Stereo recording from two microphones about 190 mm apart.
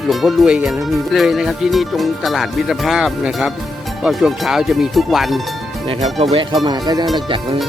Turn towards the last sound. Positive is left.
turn(degrees=-25)  # may be behind; listen again after turning